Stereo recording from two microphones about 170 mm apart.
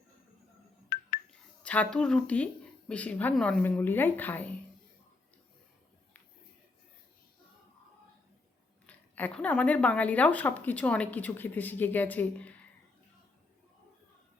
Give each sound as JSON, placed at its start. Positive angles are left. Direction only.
{"t": 0.9, "sound": "music", "side_deg": 50}
{"t": 1.3, "sound": "speech", "side_deg": 5}
{"t": 8.9, "sound": "speech", "side_deg": 10}